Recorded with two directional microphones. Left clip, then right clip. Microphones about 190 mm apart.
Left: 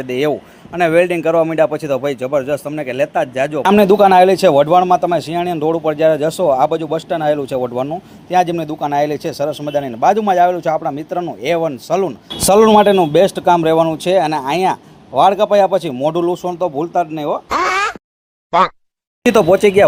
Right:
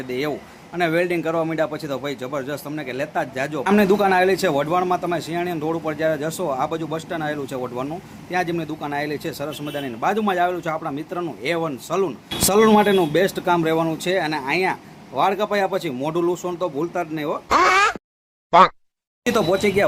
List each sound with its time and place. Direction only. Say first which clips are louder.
0.1 s a man's voice: left 9 dB; 30° left (ahead or behind)
17.5 s a sound: right 2 dB; centre (ahead or behind)
18.5 s speech: even; centre (ahead or behind)
19.2 s a man's voice: left 9 dB; 35° left (ahead or behind)